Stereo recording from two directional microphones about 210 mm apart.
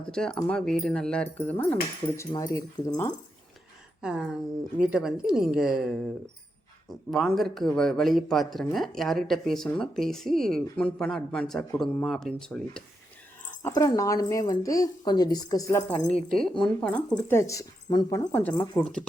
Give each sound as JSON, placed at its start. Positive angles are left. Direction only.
{"t": 0.1, "sound": "speech", "side_deg": 5}
{"t": 4.0, "sound": "speech", "side_deg": -5}
{"t": 7.1, "sound": "speech", "side_deg": 0}
{"t": 13.6, "sound": "speech", "side_deg": 15}
{"t": 16.0, "sound": "speech", "side_deg": 5}